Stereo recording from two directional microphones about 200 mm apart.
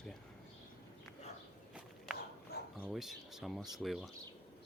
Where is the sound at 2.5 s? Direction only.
55° left (ahead or behind).